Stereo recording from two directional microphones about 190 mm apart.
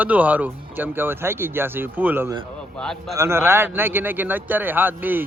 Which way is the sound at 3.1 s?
15° right (ahead or behind).